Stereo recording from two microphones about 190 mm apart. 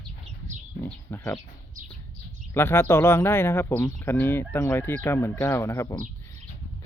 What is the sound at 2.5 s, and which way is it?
Speech, 10° left (ahead or behind).